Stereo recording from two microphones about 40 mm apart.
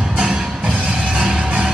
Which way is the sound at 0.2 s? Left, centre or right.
Right.